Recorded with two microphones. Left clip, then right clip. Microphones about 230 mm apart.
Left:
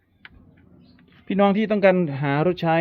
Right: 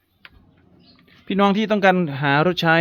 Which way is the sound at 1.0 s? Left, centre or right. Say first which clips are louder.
Right 1 dB; centre.